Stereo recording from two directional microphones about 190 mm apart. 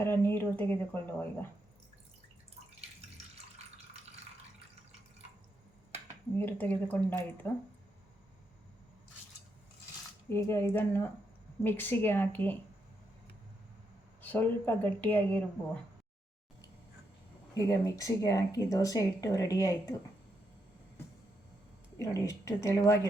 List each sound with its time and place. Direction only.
0.0 s speech: 10° left (ahead or behind)
6.3 s speech: 10° left (ahead or behind)
10.2 s speech: 15° left (ahead or behind)
14.2 s speech: 10° left (ahead or behind)
17.5 s speech: 15° left (ahead or behind)
21.9 s speech: 15° left (ahead or behind)